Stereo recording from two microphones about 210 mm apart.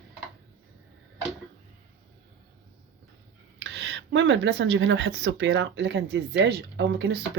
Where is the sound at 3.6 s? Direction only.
55° right (ahead or behind).